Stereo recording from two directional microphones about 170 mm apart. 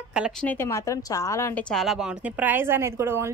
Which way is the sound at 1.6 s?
Centre (ahead or behind).